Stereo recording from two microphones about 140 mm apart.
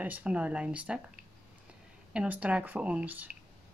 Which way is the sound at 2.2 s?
10° right (ahead or behind).